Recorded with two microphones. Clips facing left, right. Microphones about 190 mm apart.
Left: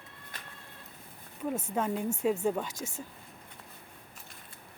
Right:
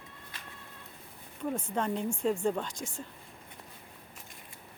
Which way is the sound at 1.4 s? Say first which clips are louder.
Left 1 dB; 5° left (ahead or behind).